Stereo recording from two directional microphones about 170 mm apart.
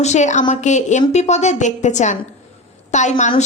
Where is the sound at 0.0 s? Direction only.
45° left (ahead or behind).